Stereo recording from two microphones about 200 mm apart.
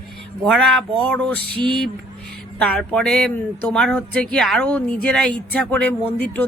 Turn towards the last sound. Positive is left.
turn(degrees=5)  # may be behind; listen again after turning